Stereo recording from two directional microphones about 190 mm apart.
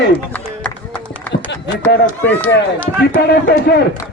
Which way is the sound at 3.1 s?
60° left (ahead or behind).